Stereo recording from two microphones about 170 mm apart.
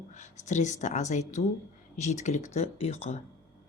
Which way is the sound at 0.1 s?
45° left (ahead or behind).